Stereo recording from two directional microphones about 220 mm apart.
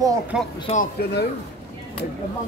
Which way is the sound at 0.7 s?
40° left (ahead or behind).